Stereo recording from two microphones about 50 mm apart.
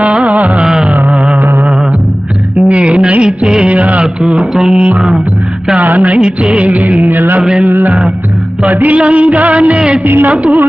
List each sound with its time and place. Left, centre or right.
0.0 s music: right
0.6 s a sound: centre
2.6 s music: right
4.0 s music: centre
5.8 s music: right
6.1 s music: centre
10.0 s music: right
10.3 s music: right